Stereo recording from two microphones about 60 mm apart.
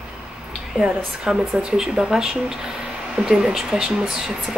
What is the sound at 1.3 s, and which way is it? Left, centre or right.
Speech, centre.